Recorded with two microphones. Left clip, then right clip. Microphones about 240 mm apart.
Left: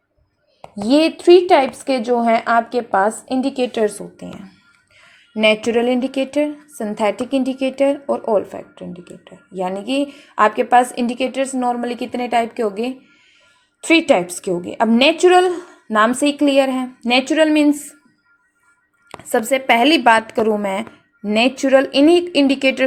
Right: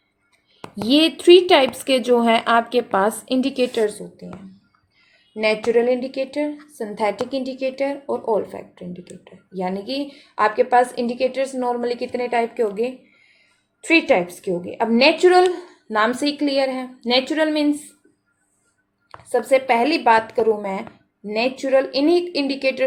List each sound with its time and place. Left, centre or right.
0.9 s speech: centre
4.9 s a woman's voice: left
19.3 s a woman's voice: left